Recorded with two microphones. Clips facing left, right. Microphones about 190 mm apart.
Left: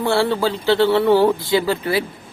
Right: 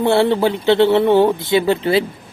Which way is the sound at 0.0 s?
20° right (ahead or behind).